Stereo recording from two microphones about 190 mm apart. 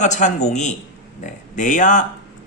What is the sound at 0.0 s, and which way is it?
Speech, 40° left (ahead or behind).